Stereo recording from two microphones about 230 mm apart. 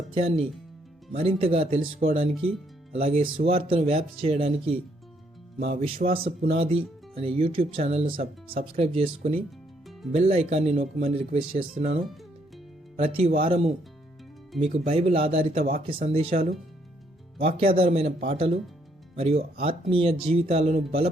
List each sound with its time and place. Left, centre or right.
0.1 s speech: right
5.8 s speech: right
8.0 s speech: right
8.7 s speech: right
13.0 s speech: right